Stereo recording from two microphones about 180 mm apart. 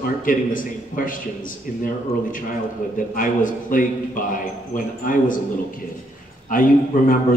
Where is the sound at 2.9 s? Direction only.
50° left (ahead or behind).